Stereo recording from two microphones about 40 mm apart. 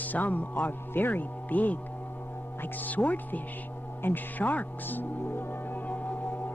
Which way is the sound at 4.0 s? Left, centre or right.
Left.